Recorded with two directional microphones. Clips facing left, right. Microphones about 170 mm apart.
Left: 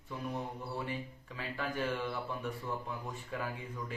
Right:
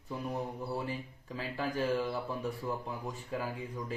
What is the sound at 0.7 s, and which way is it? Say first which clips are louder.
Speech: right 2 dB; 35° right (ahead or behind).